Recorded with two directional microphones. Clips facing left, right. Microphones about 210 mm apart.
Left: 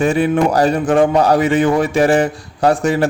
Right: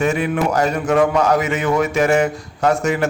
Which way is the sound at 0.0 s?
30° left (ahead or behind).